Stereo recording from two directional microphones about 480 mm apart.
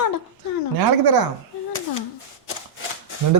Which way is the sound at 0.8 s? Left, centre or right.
Right.